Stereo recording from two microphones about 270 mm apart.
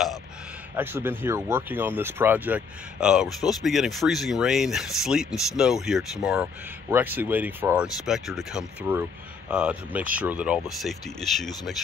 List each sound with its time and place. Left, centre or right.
0.7 s speech: centre